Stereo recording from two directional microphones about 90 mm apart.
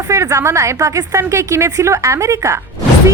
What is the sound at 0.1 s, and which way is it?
A woman's voice, 35° right (ahead or behind).